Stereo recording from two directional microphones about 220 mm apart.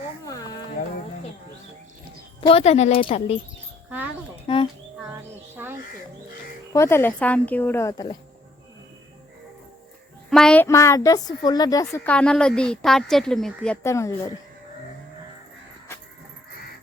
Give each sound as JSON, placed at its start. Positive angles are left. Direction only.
{"t": 2.4, "sound": "speech", "side_deg": 25}
{"t": 3.8, "sound": "a sound", "side_deg": -10}
{"t": 4.4, "sound": "a sound", "side_deg": 25}
{"t": 6.7, "sound": "a woman's voice", "side_deg": 10}
{"t": 10.2, "sound": "a woman's voice", "side_deg": 0}
{"t": 11.9, "sound": "speech", "side_deg": 5}